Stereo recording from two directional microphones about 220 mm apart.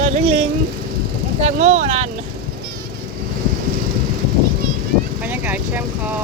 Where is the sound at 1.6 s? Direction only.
30° right (ahead or behind).